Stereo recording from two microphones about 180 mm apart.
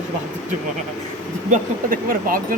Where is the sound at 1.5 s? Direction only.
50° right (ahead or behind).